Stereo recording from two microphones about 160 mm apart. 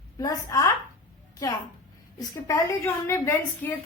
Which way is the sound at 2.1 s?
20° left (ahead or behind).